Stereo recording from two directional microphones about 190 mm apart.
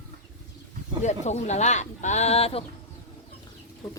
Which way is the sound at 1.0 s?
35° left (ahead or behind).